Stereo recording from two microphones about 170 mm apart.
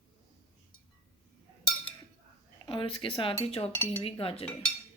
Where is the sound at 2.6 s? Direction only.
30° left (ahead or behind).